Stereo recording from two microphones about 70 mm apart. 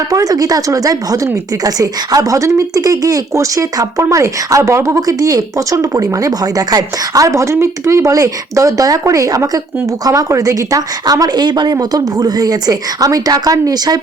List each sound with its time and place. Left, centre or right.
0.1 s speech: right
5.0 s a woman's voice: right